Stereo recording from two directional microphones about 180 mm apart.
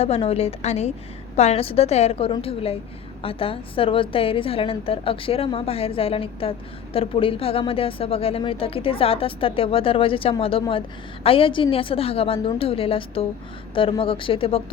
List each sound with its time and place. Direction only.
0.0 s speech: 35° left (ahead or behind)